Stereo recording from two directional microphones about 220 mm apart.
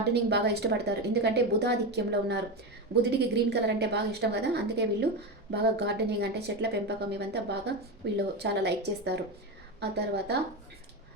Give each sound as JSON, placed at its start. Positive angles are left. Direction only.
{"t": 0.1, "sound": "a woman's voice", "side_deg": -50}